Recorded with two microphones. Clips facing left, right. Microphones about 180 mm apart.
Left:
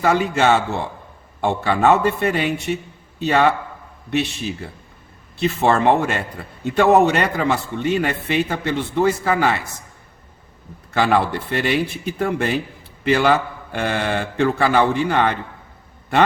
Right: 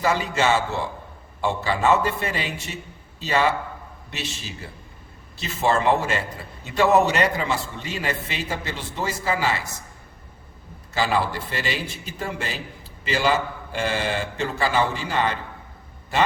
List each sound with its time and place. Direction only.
0.0 s a man's voice: 60° left (ahead or behind)
10.9 s a man's voice: 60° left (ahead or behind)